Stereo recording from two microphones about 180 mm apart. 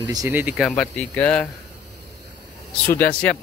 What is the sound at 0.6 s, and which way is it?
Speech, 5° left (ahead or behind).